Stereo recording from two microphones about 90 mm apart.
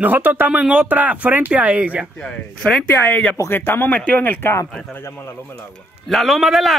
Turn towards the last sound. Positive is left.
turn(degrees=0)  # may be behind; listen again after turning